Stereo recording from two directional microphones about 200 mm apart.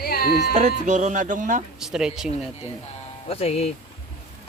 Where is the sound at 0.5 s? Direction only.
35° right (ahead or behind).